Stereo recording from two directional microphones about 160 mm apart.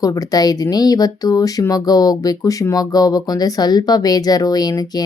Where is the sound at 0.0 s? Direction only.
20° left (ahead or behind).